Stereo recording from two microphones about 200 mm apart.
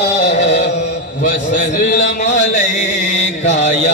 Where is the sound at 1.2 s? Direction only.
40° left (ahead or behind).